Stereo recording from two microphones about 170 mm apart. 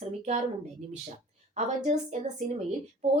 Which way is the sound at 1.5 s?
45° right (ahead or behind).